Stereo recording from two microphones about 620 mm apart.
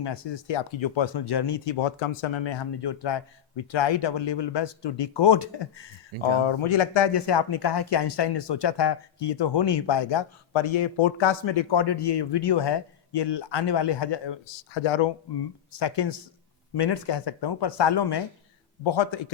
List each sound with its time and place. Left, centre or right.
0.0 s a man's voice: left